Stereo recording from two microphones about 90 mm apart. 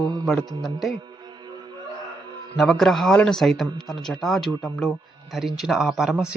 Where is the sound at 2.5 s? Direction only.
5° left (ahead or behind).